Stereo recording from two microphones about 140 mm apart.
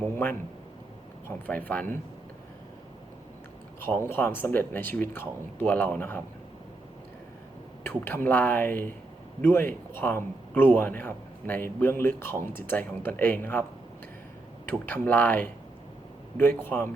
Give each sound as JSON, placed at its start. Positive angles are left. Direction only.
{"t": 0.1, "sound": "a man's voice", "side_deg": 15}
{"t": 3.8, "sound": "a man's voice", "side_deg": 15}
{"t": 7.9, "sound": "a man's voice", "side_deg": 15}
{"t": 14.7, "sound": "a man's voice", "side_deg": 15}
{"t": 16.6, "sound": "a man's voice", "side_deg": 15}